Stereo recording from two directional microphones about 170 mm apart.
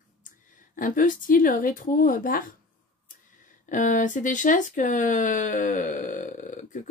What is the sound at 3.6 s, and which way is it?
Speech, 50° left (ahead or behind).